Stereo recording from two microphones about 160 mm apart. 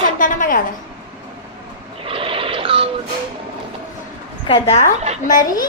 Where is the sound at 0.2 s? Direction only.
55° left (ahead or behind).